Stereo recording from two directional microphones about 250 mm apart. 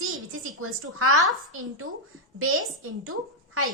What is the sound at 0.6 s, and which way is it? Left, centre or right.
A woman's voice, right.